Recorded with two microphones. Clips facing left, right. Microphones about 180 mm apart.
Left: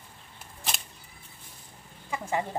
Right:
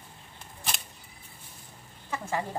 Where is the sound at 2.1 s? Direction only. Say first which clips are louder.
Left 2 dB; 15° left (ahead or behind).